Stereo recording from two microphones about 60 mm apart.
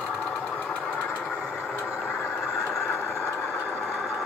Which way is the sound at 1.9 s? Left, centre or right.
Right.